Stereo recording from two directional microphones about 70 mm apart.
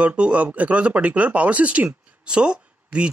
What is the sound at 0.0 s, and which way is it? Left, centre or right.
Speech, centre.